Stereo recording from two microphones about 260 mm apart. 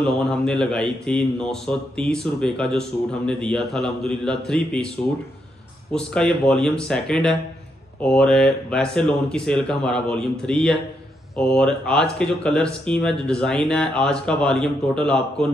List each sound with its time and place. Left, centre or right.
0.0 s a man's voice: centre
5.9 s a man's voice: centre